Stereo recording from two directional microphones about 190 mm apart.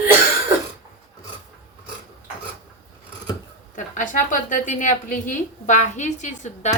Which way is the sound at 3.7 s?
40° left (ahead or behind).